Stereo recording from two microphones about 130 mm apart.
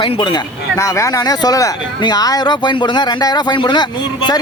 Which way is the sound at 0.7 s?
25° left (ahead or behind).